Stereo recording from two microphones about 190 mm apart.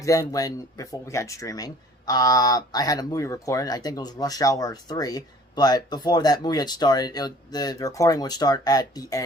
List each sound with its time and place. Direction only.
0.0 s speech: 15° left (ahead or behind)